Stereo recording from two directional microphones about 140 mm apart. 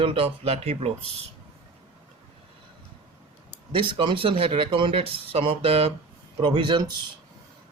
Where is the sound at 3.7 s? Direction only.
40° right (ahead or behind).